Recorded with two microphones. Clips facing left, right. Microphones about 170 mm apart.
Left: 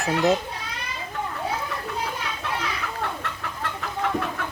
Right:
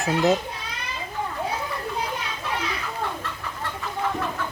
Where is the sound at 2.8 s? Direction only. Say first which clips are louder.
Even; 65° left (ahead or behind).